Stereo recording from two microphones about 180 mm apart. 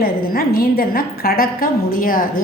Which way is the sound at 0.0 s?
55° left (ahead or behind).